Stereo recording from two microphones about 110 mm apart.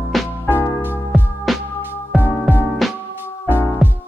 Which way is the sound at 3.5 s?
20° left (ahead or behind).